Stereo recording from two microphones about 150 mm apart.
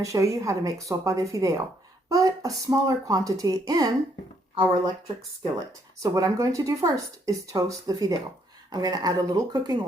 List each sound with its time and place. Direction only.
0.0 s speech: 20° right (ahead or behind)
5.4 s speech: 25° right (ahead or behind)